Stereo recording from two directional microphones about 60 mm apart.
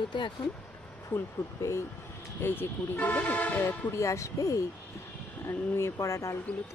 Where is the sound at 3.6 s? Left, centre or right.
Left.